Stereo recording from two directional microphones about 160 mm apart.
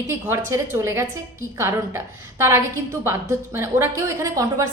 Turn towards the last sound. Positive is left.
turn(degrees=-20)  # may be behind; listen again after turning